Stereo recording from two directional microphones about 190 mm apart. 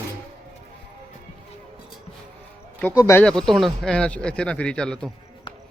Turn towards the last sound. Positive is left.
turn(degrees=5)  # may be behind; listen again after turning